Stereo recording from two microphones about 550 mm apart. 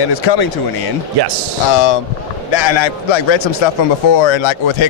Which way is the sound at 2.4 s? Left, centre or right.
Left.